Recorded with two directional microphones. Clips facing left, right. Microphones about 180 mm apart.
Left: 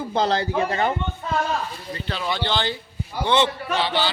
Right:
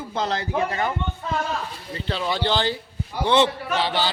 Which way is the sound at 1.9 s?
30° right (ahead or behind).